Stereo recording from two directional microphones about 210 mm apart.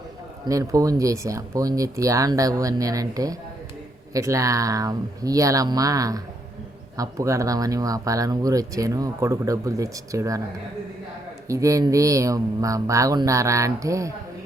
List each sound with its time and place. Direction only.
0.4 s speech: 15° right (ahead or behind)
11.4 s speech: 15° right (ahead or behind)